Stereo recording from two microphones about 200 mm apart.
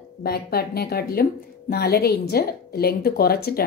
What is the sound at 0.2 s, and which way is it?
A woman's voice, 50° left (ahead or behind).